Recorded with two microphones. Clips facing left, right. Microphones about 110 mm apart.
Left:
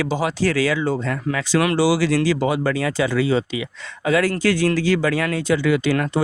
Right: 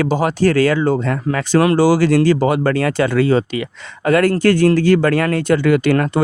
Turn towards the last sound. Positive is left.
turn(degrees=-55)  # may be behind; listen again after turning